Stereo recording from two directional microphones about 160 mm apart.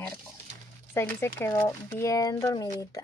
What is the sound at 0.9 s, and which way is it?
Speech, 15° left (ahead or behind).